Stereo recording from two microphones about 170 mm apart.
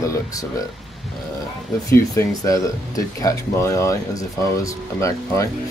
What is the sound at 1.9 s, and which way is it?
Speech, 20° left (ahead or behind).